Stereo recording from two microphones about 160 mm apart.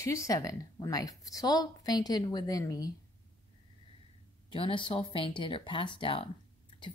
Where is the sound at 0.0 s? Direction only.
20° left (ahead or behind).